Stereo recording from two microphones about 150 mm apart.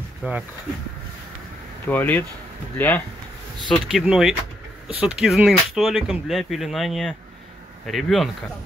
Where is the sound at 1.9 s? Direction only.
10° left (ahead or behind).